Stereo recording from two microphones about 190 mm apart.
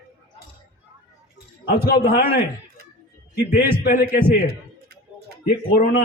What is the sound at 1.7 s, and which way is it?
Speech, 55° left (ahead or behind).